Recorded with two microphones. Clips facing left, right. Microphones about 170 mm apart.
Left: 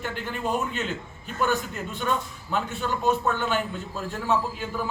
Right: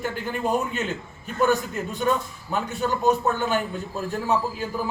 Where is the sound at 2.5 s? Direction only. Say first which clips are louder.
Right 2 dB; 40° right (ahead or behind).